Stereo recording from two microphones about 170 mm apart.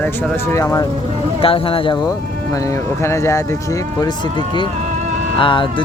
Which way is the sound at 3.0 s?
15° left (ahead or behind).